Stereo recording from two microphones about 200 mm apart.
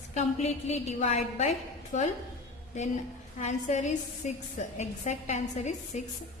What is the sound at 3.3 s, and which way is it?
A woman's voice, 35° left (ahead or behind).